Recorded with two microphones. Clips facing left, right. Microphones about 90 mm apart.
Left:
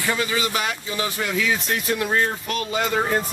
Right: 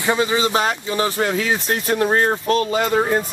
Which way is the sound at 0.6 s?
40° right (ahead or behind).